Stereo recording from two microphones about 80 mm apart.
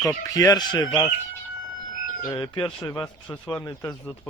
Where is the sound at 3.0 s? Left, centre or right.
Centre.